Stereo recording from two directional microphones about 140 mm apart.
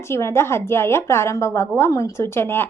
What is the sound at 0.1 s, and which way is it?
A woman's voice, 20° left (ahead or behind).